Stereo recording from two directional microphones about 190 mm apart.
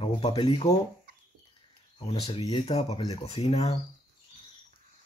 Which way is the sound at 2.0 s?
30° left (ahead or behind).